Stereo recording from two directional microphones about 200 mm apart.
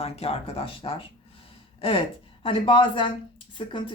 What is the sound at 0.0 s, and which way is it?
Speech, 30° left (ahead or behind).